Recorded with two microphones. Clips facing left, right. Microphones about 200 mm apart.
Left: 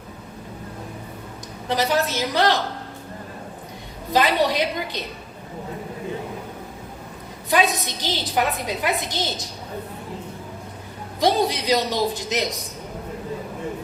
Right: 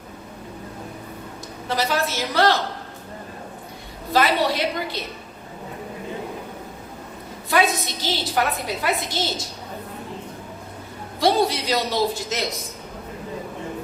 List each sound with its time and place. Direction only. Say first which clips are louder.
1.6 s a woman's voice: left 2 dB; 20° left (ahead or behind)
4.1 s a woman's voice: even; 15° left (ahead or behind)
7.5 s a woman's voice: even; 15° left (ahead or behind)
11.2 s a woman's voice: right 1 dB; 20° left (ahead or behind)